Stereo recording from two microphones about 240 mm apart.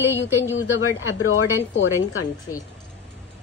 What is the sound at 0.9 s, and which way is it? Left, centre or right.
Speech, left.